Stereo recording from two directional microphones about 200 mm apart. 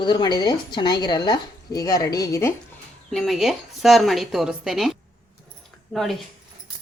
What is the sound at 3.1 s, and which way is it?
A woman's voice, centre (ahead or behind).